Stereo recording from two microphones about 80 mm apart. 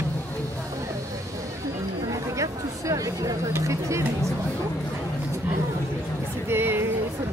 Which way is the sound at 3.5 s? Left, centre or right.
Right.